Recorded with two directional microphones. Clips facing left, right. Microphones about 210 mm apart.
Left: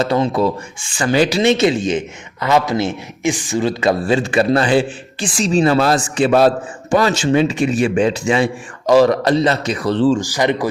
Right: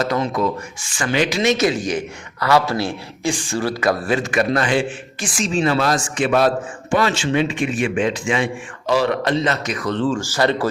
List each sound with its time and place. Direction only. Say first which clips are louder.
0.0 s a man's voice: left 4 dB; 30° left (ahead or behind)
6.9 s a man's voice: left 4 dB; 40° left (ahead or behind)
10.2 s speech: left 2 dB; 15° left (ahead or behind)